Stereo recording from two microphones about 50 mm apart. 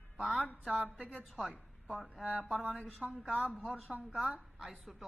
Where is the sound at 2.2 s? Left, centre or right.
Right.